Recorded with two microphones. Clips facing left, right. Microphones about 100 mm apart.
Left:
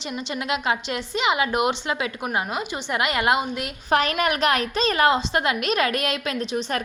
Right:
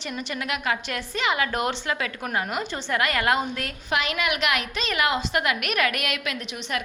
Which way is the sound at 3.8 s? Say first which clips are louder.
Left 5 dB; 40° left (ahead or behind).